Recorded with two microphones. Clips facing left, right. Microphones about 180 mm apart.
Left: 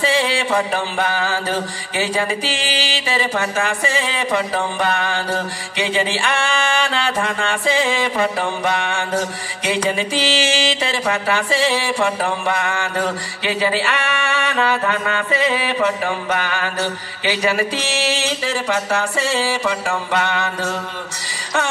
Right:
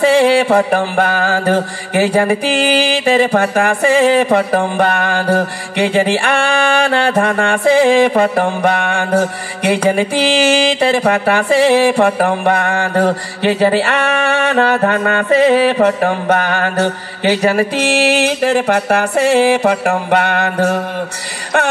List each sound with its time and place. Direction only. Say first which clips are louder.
0.0 s music: right 9 dB; 55° right (ahead or behind)